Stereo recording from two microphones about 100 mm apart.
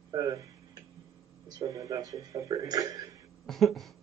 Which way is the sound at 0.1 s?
40° right (ahead or behind).